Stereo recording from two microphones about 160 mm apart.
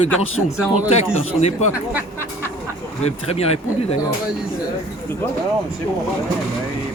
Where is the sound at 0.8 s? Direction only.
40° left (ahead or behind).